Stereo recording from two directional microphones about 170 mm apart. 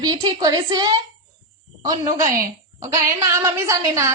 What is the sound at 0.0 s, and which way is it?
Music, 25° right (ahead or behind).